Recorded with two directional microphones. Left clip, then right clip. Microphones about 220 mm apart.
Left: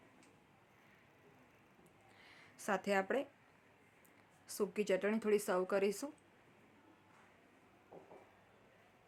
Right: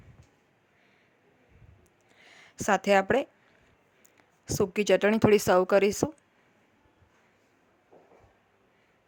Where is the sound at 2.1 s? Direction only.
30° right (ahead or behind).